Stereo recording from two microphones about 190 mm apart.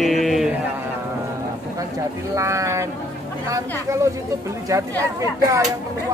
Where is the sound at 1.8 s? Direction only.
15° right (ahead or behind).